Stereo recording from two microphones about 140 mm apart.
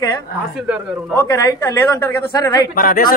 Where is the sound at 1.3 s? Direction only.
20° left (ahead or behind).